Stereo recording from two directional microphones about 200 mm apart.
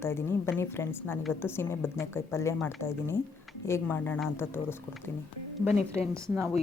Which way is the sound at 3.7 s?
10° left (ahead or behind).